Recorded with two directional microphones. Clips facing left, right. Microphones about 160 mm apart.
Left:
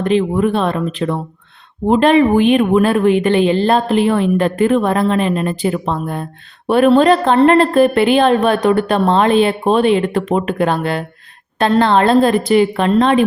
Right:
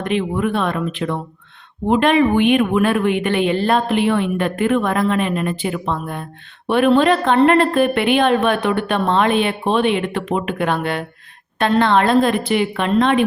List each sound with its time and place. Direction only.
0.0 s a woman's voice: 35° left (ahead or behind)